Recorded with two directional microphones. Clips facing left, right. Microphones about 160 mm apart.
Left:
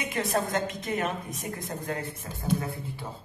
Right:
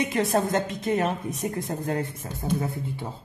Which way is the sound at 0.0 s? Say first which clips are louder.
Right 5 dB; 25° right (ahead or behind).